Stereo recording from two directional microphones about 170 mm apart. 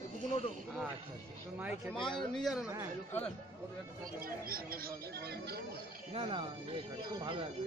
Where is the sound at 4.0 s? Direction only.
60° right (ahead or behind).